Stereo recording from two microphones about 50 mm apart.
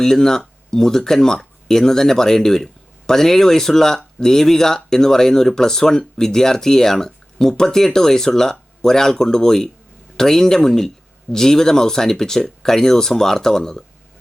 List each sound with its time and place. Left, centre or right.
0.0 s speech: centre